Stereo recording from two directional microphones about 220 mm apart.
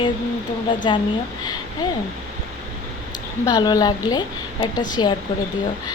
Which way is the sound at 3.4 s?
15° left (ahead or behind).